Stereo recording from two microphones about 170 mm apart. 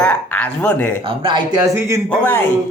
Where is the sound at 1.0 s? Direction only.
30° right (ahead or behind).